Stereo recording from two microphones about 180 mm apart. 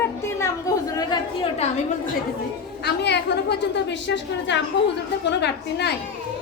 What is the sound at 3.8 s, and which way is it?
A woman's voice, 80° left.